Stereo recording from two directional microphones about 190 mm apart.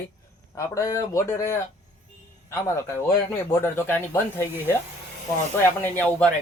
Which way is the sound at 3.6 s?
10° left (ahead or behind).